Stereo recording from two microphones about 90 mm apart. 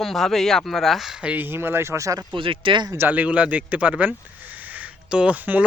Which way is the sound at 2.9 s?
20° right (ahead or behind).